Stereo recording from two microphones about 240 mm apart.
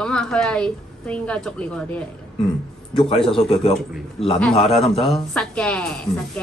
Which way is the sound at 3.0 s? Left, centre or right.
Left.